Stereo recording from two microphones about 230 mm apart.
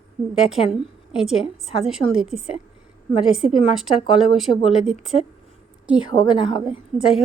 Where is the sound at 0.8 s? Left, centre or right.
Centre.